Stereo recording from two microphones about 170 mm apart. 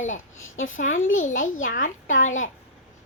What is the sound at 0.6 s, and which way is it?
A child's voice, 45° left (ahead or behind).